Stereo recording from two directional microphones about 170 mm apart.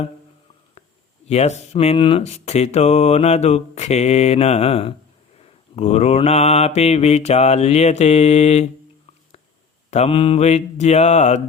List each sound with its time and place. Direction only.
0.8 s speech: 40° left (ahead or behind)
9.9 s speech: 35° left (ahead or behind)